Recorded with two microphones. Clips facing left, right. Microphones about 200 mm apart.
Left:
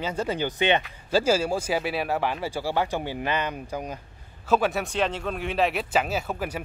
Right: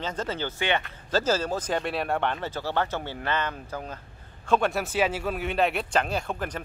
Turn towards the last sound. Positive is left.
turn(degrees=5)  # may be behind; listen again after turning